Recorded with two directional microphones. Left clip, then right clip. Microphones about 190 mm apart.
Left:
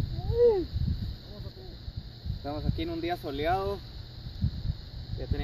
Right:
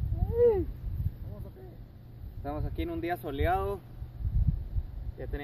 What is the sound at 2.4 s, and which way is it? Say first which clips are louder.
Speech: left 1 dB; 5° left (ahead or behind).